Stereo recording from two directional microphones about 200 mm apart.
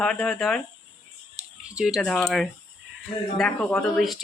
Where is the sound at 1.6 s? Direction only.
5° right (ahead or behind).